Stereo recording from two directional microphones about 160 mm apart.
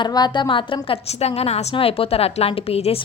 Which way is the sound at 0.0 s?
30° left (ahead or behind).